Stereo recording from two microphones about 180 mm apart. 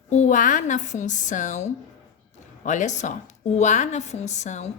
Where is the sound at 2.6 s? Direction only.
40° left (ahead or behind).